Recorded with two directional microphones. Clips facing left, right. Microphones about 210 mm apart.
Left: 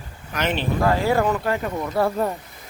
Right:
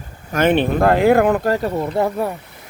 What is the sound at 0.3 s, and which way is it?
Speech, 50° right (ahead or behind).